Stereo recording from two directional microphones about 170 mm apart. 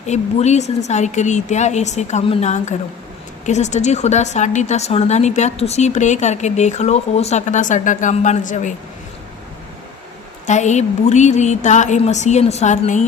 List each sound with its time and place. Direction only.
0.0 s a woman's voice: 40° left (ahead or behind)
10.4 s a woman's voice: 45° left (ahead or behind)